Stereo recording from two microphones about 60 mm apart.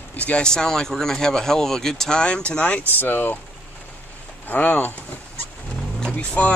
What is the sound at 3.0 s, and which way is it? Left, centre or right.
Speech, left.